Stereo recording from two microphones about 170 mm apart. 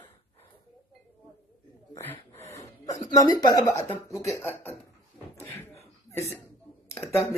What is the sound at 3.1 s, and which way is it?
Speech, 20° left (ahead or behind).